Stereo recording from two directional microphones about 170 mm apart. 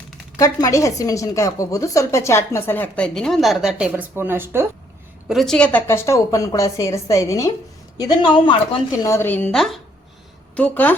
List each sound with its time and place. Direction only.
0.3 s a woman's voice: 20° left (ahead or behind); by 4.6 s 15° right (ahead or behind)
5.3 s a woman's voice: centre (ahead or behind)